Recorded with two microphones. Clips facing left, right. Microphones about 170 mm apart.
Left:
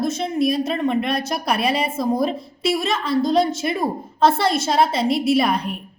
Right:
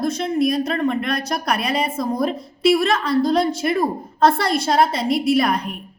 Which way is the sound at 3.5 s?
25° left (ahead or behind).